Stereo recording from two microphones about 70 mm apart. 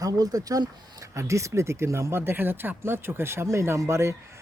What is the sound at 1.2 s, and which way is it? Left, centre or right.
Speech, right.